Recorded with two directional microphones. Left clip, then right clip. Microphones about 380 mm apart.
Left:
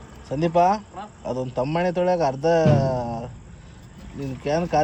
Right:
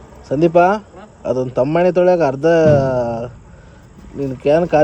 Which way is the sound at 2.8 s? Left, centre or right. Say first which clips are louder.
Right 8 dB; right.